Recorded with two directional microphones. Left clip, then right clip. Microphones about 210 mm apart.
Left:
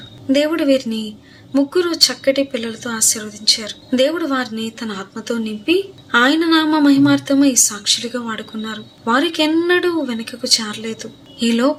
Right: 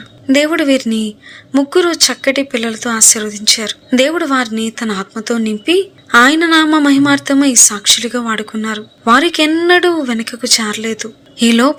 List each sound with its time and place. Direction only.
0.3 s speech: 45° right (ahead or behind)